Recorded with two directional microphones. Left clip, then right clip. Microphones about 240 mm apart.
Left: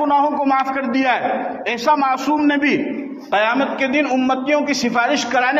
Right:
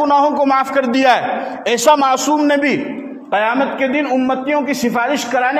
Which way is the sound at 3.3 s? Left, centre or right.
Right.